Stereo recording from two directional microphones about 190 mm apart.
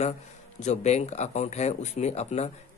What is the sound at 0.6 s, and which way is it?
Speech, 35° left (ahead or behind).